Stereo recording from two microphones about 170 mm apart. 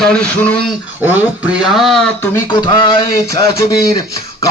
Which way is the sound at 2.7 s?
30° left (ahead or behind).